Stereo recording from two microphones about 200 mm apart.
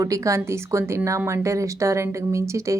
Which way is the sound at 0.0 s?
15° right (ahead or behind).